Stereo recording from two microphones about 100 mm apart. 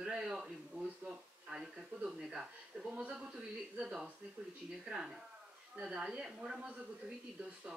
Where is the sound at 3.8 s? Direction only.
5° right (ahead or behind).